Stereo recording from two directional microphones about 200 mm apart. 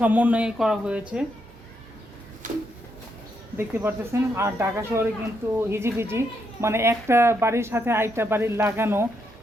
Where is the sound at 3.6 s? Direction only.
10° right (ahead or behind).